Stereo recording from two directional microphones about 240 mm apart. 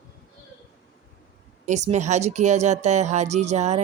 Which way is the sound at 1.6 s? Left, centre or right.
Right.